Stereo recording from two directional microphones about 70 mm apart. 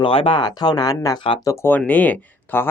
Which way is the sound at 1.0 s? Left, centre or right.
Left.